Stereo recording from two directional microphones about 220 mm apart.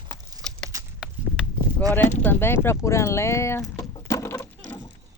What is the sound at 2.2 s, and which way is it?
Speech, 10° left (ahead or behind).